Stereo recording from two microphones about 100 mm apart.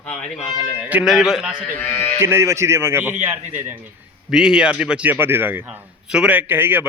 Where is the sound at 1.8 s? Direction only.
25° left (ahead or behind).